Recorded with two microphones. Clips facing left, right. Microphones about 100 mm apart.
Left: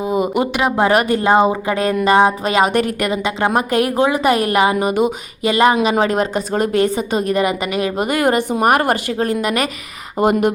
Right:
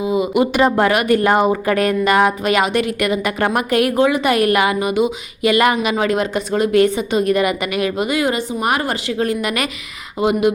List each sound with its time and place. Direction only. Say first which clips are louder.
0.0 s a sound: right 1 dB; 45° left (ahead or behind)
0.9 s a woman's voice: left 1 dB; 30° left (ahead or behind)
5.5 s a woman's voice: left 1 dB; 30° left (ahead or behind)
10.2 s speech: left 2 dB; 45° left (ahead or behind)